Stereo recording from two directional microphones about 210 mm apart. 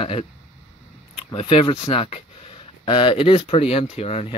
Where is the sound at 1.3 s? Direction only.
25° left (ahead or behind).